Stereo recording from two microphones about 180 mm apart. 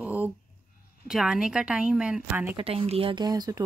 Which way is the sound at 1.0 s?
5° right (ahead or behind).